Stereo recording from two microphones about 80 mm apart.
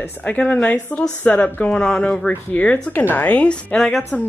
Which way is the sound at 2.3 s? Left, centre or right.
Centre.